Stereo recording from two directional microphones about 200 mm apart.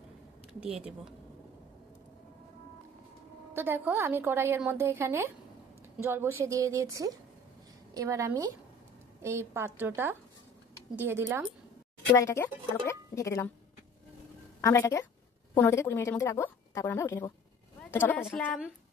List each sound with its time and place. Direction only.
0.6 s speech: 5° right (ahead or behind)
3.5 s a woman's voice: 10° right (ahead or behind)
12.2 s a woman's voice: 15° left (ahead or behind)
14.6 s a woman's voice: 15° left (ahead or behind)